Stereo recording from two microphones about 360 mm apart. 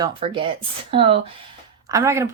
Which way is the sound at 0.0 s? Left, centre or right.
Centre.